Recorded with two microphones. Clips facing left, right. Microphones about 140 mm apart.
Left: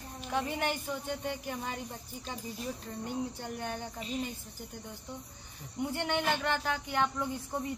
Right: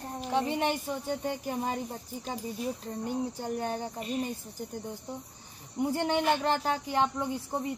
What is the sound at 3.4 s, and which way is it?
Cricket, 35° right (ahead or behind).